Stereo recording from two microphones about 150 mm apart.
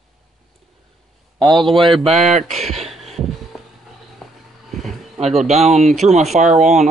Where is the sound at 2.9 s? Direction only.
Centre (ahead or behind).